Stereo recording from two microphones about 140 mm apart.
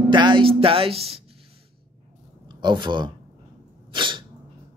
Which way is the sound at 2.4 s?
35° right (ahead or behind).